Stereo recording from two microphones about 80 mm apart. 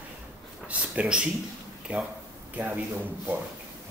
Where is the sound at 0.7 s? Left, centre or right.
Centre.